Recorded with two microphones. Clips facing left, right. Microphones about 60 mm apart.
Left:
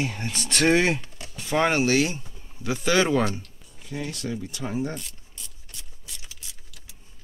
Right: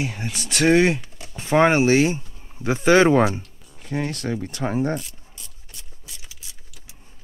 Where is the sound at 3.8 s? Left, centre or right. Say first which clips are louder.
Right 6 dB; right.